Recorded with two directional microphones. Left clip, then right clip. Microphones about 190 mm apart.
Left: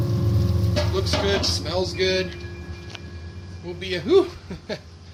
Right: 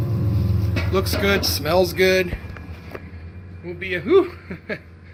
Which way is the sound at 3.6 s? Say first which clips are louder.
Right 2 dB; centre (ahead or behind).